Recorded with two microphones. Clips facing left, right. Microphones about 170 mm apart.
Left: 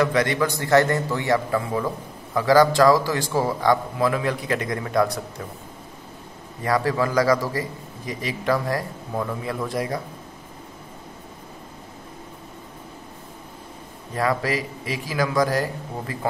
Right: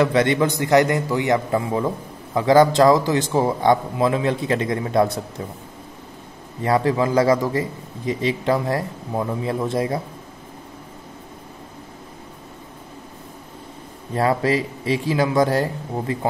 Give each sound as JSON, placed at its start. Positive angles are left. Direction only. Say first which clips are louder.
{"t": 0.0, "sound": "a man's voice", "louder": "right 3 dB", "side_deg": -25}
{"t": 6.6, "sound": "a man's voice", "louder": "right 3 dB", "side_deg": -25}
{"t": 14.1, "sound": "a man's voice", "louder": "right 4 dB", "side_deg": -25}